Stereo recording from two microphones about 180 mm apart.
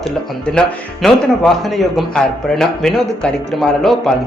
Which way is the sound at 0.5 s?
5° left (ahead or behind).